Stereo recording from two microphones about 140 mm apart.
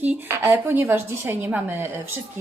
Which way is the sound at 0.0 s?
15° right (ahead or behind).